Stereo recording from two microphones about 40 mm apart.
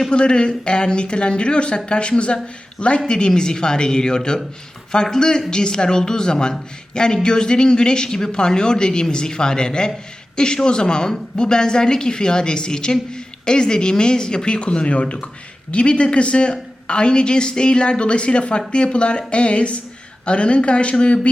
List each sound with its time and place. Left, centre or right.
0.1 s speech: left